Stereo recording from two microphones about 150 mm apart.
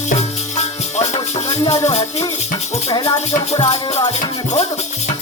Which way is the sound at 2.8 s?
30° left (ahead or behind).